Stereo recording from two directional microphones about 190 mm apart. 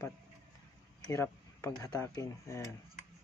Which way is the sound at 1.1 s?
15° left (ahead or behind).